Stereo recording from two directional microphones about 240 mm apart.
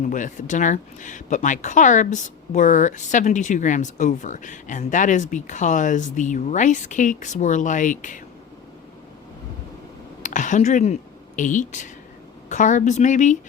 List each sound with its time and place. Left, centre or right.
0.0 s speech: left
10.2 s speech: left